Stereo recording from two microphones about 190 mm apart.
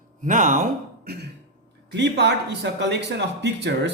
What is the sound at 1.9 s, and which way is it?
A man's voice, 65° right (ahead or behind).